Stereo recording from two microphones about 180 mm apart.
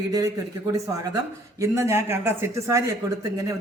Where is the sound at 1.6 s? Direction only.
15° right (ahead or behind).